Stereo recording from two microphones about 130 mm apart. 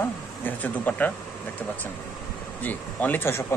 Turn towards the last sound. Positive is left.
turn(degrees=15)  # may be behind; listen again after turning